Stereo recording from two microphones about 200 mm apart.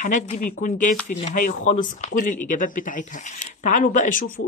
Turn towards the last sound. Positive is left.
turn(degrees=45)  # may be behind; listen again after turning